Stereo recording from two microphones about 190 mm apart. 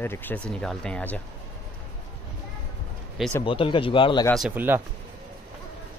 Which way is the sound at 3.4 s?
25° left (ahead or behind).